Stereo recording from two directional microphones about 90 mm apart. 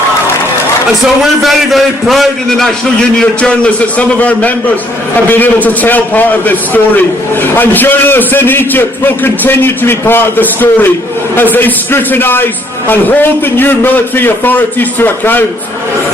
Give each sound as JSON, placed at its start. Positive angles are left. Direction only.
{"t": 1.2, "sound": "a man's voice", "side_deg": 0}